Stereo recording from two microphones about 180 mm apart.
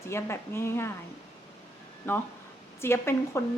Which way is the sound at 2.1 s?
15° left (ahead or behind).